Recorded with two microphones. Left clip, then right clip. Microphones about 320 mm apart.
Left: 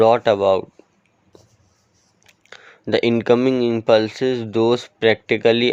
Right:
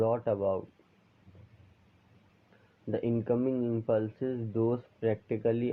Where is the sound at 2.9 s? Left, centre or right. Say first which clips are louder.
Left 15 dB; left.